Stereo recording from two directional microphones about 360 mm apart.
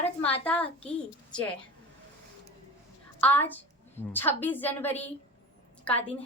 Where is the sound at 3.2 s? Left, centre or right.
Centre.